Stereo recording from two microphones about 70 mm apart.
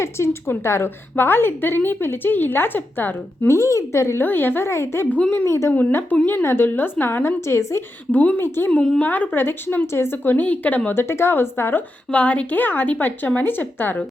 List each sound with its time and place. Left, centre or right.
0.0 s a woman's voice: left
3.4 s speech: left
4.2 s a woman's voice: left
5.1 s speech: left
5.5 s a woman's voice: left
5.9 s a woman's voice: left
8.1 s speech: left
8.4 s a woman's voice: left
9.0 s speech: left
10.9 s a woman's voice: left
12.1 s speech: centre